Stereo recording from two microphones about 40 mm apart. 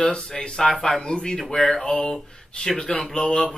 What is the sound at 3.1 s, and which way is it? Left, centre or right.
Speech, left.